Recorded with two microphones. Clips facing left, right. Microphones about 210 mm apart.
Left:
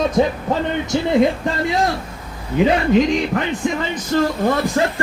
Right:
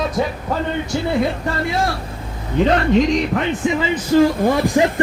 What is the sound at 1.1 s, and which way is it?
A man's voice, 20° left (ahead or behind).